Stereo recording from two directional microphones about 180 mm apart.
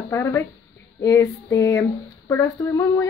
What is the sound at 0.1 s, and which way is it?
Female singing, 15° left (ahead or behind).